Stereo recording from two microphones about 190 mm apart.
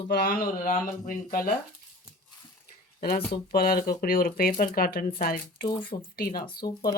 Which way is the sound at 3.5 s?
50° left (ahead or behind).